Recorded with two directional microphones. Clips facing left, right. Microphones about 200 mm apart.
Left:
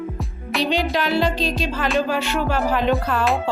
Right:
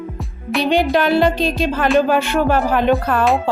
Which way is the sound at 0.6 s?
55° right (ahead or behind).